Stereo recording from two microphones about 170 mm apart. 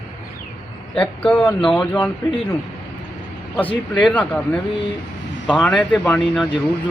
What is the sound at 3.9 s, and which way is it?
Speech, 5° left (ahead or behind).